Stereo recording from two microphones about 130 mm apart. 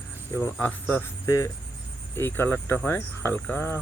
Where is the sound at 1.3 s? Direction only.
25° left (ahead or behind).